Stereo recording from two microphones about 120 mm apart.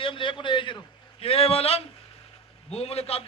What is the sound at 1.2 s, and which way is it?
A man's voice, 55° left (ahead or behind).